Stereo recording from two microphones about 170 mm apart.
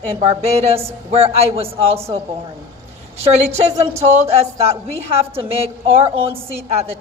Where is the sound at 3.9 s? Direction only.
40° right (ahead or behind).